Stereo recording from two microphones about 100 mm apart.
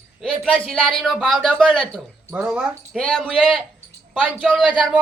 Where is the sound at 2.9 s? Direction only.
10° left (ahead or behind).